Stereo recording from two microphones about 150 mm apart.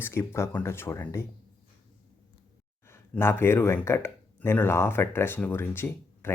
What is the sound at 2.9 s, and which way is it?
Speech, 15° left (ahead or behind).